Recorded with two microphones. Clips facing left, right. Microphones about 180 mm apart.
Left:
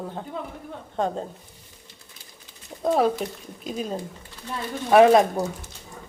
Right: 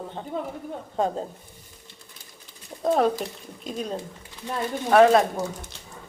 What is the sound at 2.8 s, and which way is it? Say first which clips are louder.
A woman's voice: even; centre (ahead or behind).